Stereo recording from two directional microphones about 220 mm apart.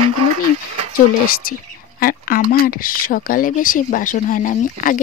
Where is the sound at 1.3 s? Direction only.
40° left (ahead or behind).